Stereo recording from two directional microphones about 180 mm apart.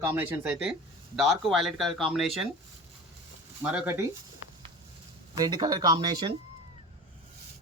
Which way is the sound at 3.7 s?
10° right (ahead or behind).